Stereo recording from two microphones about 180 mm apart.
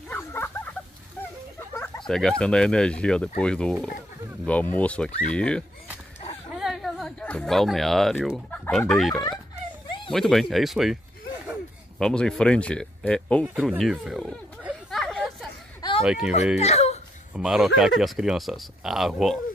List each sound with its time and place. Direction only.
0.1 s a sound: 10° left (ahead or behind)
2.0 s speech: 5° left (ahead or behind)
9.8 s dog: 25° left (ahead or behind)
10.1 s speech: centre (ahead or behind)
12.0 s speech: 5° left (ahead or behind)
16.5 s whimper: 35° left (ahead or behind)
17.3 s speech: 5° right (ahead or behind)